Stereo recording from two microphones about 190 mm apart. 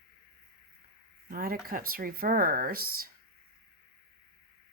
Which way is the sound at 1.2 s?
50° right (ahead or behind).